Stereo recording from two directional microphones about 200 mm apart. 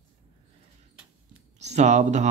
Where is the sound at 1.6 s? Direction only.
35° right (ahead or behind).